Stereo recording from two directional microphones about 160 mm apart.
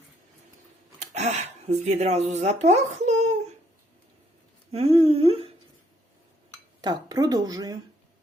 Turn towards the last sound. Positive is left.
turn(degrees=-20)  # may be behind; listen again after turning